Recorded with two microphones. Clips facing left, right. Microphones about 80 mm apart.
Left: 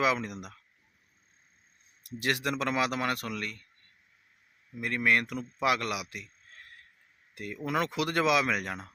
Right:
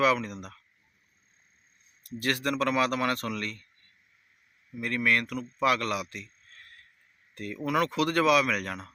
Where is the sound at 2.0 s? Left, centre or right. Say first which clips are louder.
Right 1 dB; centre.